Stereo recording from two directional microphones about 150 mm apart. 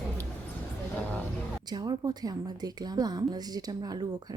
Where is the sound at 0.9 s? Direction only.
10° left (ahead or behind).